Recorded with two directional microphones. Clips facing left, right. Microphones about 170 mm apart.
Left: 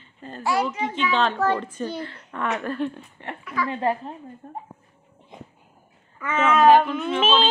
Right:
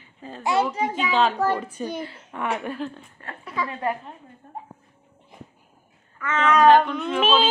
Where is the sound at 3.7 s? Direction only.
30° left (ahead or behind).